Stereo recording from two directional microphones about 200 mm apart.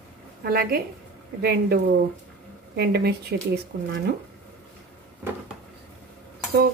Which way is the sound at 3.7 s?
50° right (ahead or behind).